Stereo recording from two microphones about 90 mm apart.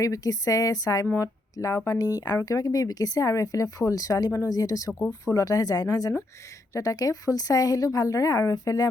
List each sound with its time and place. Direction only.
0.0 s a woman's voice: 40° left (ahead or behind)